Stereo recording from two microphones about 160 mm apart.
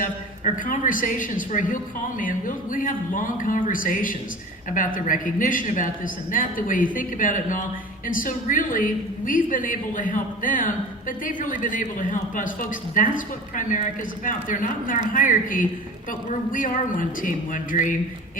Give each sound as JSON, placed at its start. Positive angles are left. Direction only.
{"t": 0.0, "sound": "a woman's voice", "side_deg": 55}